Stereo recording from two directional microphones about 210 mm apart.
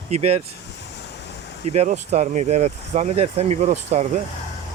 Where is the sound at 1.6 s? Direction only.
35° right (ahead or behind).